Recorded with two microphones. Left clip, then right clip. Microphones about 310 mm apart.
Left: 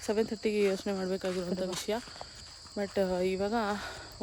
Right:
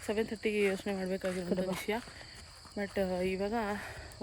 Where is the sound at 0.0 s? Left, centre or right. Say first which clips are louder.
Left 3 dB; centre.